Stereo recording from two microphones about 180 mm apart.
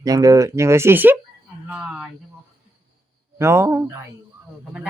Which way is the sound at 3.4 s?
15° right (ahead or behind).